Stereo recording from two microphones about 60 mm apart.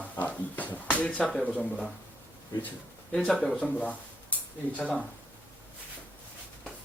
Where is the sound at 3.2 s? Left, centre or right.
Centre.